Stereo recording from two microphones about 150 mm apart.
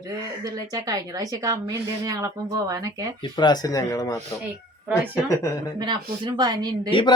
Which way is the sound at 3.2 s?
30° left (ahead or behind).